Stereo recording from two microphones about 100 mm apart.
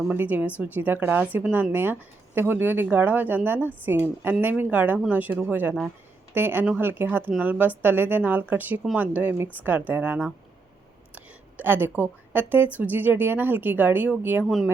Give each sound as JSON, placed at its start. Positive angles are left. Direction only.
{"t": 0.1, "sound": "a woman's voice", "side_deg": -15}
{"t": 14.4, "sound": "speech", "side_deg": -5}